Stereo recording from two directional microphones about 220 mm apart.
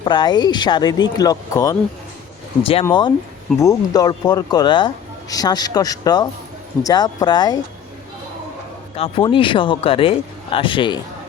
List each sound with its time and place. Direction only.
0.0 s speech: 20° left (ahead or behind)
2.8 s speech: 20° left (ahead or behind)
9.0 s speech: 25° left (ahead or behind)